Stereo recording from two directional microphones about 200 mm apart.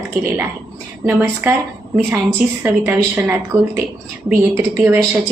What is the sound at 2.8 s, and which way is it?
A woman's voice, 10° right (ahead or behind).